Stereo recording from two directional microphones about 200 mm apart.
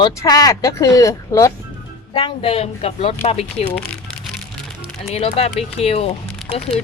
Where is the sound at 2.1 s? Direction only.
25° left (ahead or behind).